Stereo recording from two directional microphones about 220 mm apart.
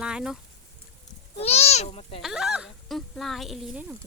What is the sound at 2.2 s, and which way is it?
Speech, centre (ahead or behind).